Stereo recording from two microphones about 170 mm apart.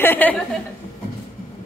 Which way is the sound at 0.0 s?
10° left (ahead or behind).